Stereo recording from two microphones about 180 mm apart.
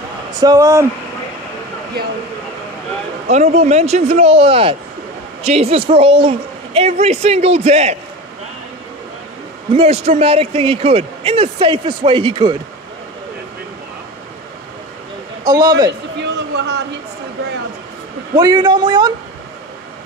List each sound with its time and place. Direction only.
0.4 s speech: 20° right (ahead or behind)
3.3 s a man's voice: 40° right (ahead or behind)
9.7 s a man's voice: 35° right (ahead or behind)
15.4 s a man's voice: 20° right (ahead or behind)
16.2 s a sound: 70° right (ahead or behind)
18.3 s a man's voice: 25° right (ahead or behind)